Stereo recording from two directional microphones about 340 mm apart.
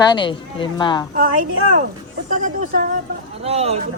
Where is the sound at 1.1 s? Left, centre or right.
Right.